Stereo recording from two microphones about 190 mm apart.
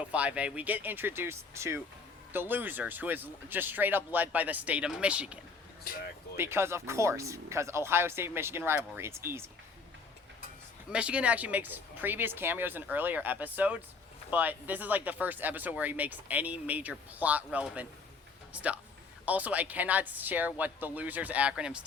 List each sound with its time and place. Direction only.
0.1 s speech: 5° right (ahead or behind)
5.8 s speech: 50° left (ahead or behind)
6.3 s speech: 10° right (ahead or behind)
10.8 s speech: 5° right (ahead or behind)